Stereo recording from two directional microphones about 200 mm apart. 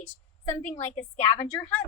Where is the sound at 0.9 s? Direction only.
30° left (ahead or behind).